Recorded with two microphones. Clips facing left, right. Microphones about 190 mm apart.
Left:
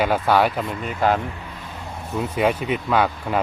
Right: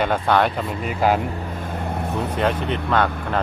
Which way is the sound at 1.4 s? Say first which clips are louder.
Right 8 dB; 50° right (ahead or behind).